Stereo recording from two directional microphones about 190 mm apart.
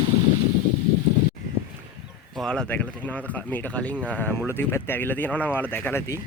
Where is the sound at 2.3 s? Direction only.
Centre (ahead or behind).